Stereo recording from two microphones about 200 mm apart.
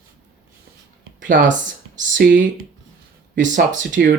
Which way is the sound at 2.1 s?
45° right (ahead or behind).